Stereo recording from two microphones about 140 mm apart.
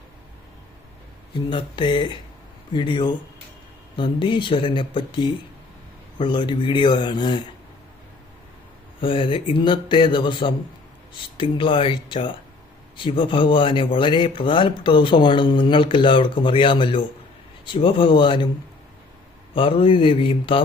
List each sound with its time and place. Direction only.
1.3 s speech: 35° left (ahead or behind)
9.0 s speech: 40° left (ahead or behind)
19.5 s speech: 40° left (ahead or behind)